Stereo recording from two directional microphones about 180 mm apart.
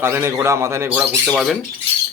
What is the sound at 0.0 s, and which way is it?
Speech, 15° right (ahead or behind).